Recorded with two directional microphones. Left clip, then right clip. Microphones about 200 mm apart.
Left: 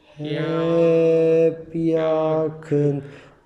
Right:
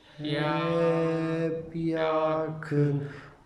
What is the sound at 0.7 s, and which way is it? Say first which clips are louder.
Mantra: left 12 dB; 15° left (ahead or behind).